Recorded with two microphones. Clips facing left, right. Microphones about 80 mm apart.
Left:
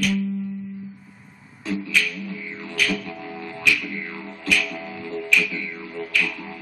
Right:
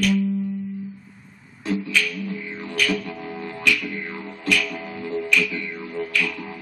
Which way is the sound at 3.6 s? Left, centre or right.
Centre.